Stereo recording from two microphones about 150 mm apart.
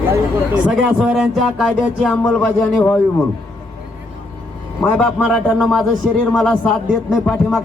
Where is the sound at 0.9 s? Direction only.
Centre (ahead or behind).